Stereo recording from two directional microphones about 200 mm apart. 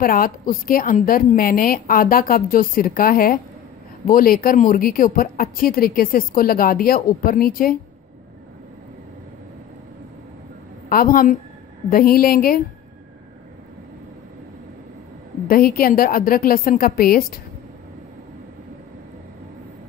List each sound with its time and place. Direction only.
0.0 s speech: 45° left (ahead or behind)
10.9 s speech: 45° left (ahead or behind)
15.4 s speech: 45° left (ahead or behind)